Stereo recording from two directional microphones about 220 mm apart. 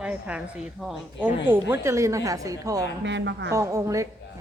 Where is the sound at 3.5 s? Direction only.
15° right (ahead or behind).